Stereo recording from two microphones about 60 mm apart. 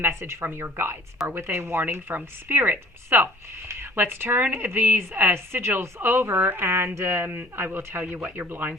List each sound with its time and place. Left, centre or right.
0.0 s a woman's voice: right